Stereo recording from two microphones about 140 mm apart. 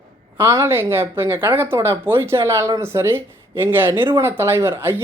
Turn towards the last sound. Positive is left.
turn(degrees=-15)  # may be behind; listen again after turning